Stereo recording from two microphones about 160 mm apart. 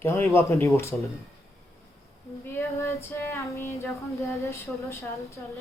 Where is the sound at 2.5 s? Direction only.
20° left (ahead or behind).